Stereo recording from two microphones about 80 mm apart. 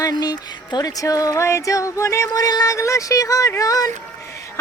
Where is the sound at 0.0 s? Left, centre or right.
Left.